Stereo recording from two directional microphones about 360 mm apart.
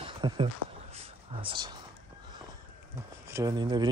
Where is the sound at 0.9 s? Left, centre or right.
Centre.